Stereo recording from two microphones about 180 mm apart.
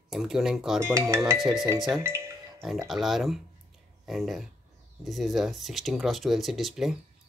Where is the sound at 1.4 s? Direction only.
Centre (ahead or behind).